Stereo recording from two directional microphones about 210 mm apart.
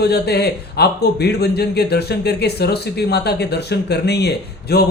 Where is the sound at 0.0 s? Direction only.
50° left (ahead or behind).